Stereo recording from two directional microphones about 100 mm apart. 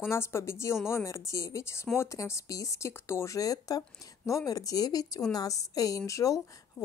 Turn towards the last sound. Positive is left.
turn(degrees=35)  # may be behind; listen again after turning